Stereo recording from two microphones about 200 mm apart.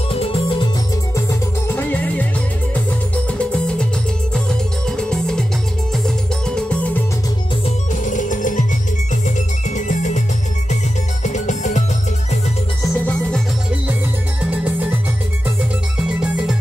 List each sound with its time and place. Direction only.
0.1 s music: 30° left (ahead or behind)
1.7 s music: 10° left (ahead or behind)
7.6 s music: 40° left (ahead or behind)
9.8 s music: 35° left (ahead or behind)
11.2 s music: 35° left (ahead or behind)
12.8 s music: 10° left (ahead or behind)
14.5 s music: 10° right (ahead or behind)
16.2 s music: 5° right (ahead or behind)